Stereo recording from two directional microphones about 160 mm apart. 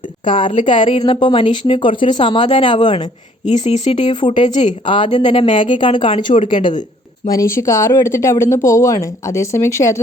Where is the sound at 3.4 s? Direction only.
45° left (ahead or behind).